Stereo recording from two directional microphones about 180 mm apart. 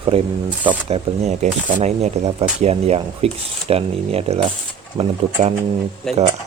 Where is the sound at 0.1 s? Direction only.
35° right (ahead or behind).